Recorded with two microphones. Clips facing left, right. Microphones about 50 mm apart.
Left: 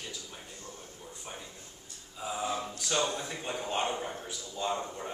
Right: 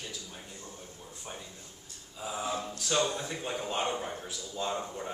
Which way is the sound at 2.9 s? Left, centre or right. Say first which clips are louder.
Right 1 dB; centre.